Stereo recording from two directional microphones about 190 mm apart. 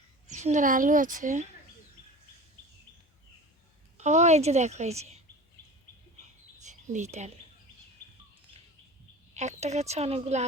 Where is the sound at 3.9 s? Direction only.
40° right (ahead or behind).